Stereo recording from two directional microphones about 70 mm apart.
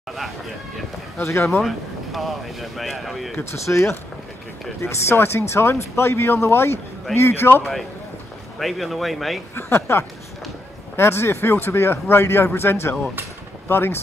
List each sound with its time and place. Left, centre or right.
1.1 s speech: left
1.6 s speech: centre
3.5 s speech: left
8.5 s speech: centre
9.6 s speech: left